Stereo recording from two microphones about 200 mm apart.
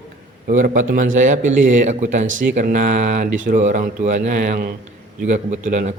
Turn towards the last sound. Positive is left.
turn(degrees=-40)  # may be behind; listen again after turning